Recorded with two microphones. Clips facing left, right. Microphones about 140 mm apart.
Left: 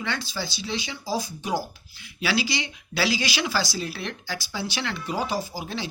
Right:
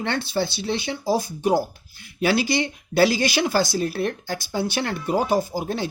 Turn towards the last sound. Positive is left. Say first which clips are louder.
# right 6 dB
turn(degrees=-50)  # may be behind; listen again after turning